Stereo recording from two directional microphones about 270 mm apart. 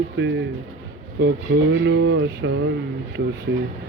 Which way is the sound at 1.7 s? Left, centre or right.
Right.